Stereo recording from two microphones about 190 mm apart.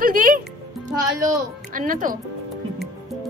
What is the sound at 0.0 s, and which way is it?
Music, 45° right (ahead or behind).